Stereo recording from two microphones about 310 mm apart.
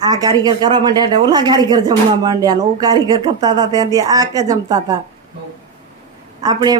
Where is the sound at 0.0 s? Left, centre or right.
Centre.